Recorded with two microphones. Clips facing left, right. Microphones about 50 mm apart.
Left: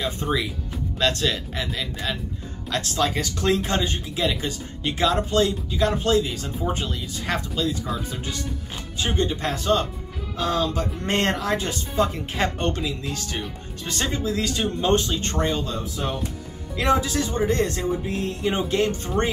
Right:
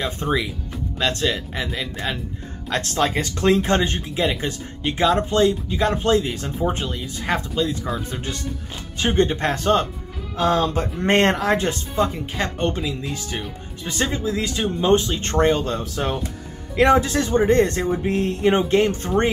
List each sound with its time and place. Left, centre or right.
0.0 s speech: right
0.9 s speech: centre
2.7 s speech: right
6.6 s speech: right
8.9 s speech: right
11.1 s speech: right
11.9 s speech: centre
15.1 s speech: right
15.8 s speech: right
16.7 s speech: right